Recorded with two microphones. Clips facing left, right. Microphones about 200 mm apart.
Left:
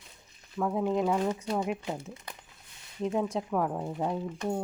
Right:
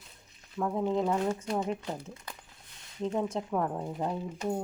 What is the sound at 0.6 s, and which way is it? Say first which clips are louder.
A woman's voice: left 1 dB; 5° left (ahead or behind).